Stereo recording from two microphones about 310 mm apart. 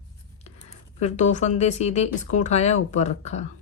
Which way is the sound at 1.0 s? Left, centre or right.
Left.